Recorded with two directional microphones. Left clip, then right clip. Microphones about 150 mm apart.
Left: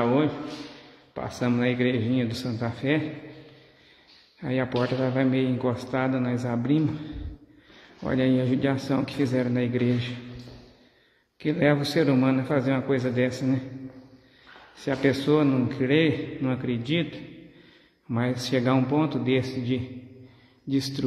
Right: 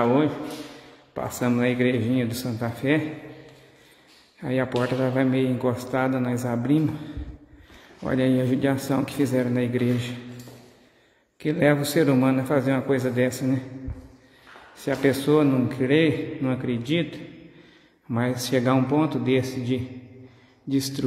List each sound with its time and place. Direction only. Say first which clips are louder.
0.0 s a man's voice: right 2 dB; centre (ahead or behind)
4.4 s a man's voice: right 2 dB; centre (ahead or behind)
11.3 s a man's voice: right 2 dB; centre (ahead or behind)
14.8 s a man's voice: right 2 dB; centre (ahead or behind)